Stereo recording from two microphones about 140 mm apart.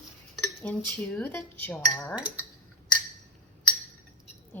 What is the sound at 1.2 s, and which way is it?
Speech, 15° left (ahead or behind).